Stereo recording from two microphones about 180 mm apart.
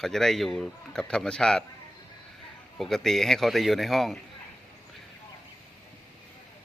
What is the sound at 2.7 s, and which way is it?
A man's voice, centre (ahead or behind).